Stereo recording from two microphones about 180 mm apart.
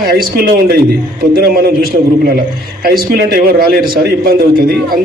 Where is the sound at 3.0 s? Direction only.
55° right (ahead or behind).